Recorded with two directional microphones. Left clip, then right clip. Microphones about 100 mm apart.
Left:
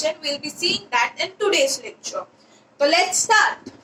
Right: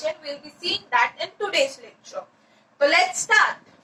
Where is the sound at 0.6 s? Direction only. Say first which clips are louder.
Left 1 dB; 25° left (ahead or behind).